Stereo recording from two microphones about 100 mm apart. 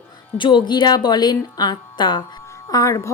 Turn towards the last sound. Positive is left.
turn(degrees=30)  # may be behind; listen again after turning